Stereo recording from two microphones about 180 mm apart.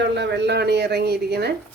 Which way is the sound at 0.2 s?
70° right (ahead or behind).